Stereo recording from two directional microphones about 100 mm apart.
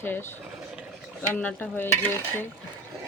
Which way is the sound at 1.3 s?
15° left (ahead or behind).